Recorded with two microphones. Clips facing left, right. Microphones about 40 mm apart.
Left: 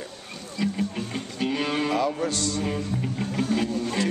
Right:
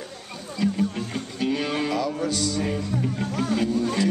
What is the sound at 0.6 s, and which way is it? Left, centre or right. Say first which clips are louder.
Music: right 3 dB; centre.